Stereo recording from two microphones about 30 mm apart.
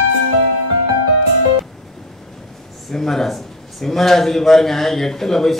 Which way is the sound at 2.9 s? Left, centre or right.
Centre.